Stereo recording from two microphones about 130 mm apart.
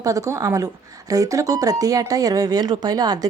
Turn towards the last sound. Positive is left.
turn(degrees=-30)  # may be behind; listen again after turning